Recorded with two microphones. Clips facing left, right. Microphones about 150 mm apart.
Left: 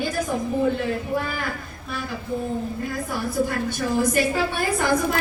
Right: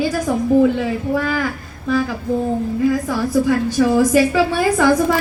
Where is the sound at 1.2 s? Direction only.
90° right.